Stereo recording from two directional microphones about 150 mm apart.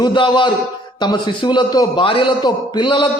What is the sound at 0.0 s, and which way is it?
A man's voice, 30° left (ahead or behind).